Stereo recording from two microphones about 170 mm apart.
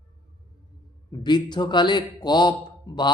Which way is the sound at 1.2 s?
25° left (ahead or behind).